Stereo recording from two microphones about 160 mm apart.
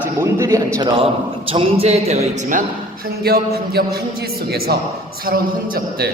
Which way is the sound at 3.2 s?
80° right.